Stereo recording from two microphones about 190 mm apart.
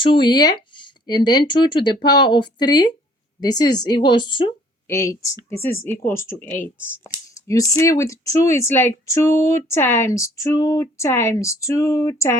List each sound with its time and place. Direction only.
0.0 s a woman's voice: 25° left (ahead or behind)